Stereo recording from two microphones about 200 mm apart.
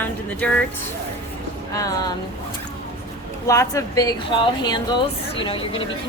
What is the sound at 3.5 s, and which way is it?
Speech, 15° left (ahead or behind).